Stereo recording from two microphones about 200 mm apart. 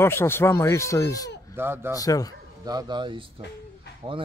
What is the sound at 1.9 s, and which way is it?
Speech, 15° left (ahead or behind).